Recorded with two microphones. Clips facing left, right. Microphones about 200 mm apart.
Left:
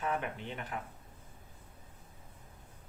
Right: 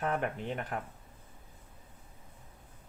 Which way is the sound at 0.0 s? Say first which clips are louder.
Right 3 dB; 50° right (ahead or behind).